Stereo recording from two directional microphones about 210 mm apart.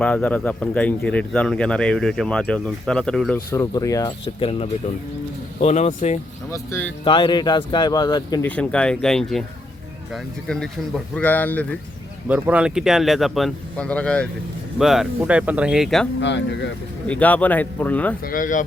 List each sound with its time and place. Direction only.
0.0 s speech: 5° left (ahead or behind)
3.3 s speech: 15° left (ahead or behind); by 6.1 s 30° left (ahead or behind)
6.5 s speech: 10° left (ahead or behind)
7.0 s speech: 25° left (ahead or behind)
8.4 s speech: 5° left (ahead or behind)
12.3 s speech: 5° right (ahead or behind)
16.2 s speech: 55° left (ahead or behind)
17.1 s speech: 5° left (ahead or behind)
18.3 s speech: 40° left (ahead or behind)